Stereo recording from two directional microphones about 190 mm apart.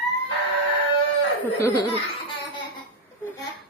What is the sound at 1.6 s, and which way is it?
Speech, 15° left (ahead or behind).